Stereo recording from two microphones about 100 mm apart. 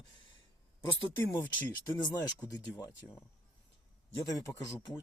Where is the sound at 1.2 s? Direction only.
25° left (ahead or behind).